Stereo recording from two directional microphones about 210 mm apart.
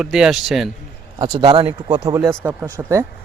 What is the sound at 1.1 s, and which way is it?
Speech, 20° right (ahead or behind).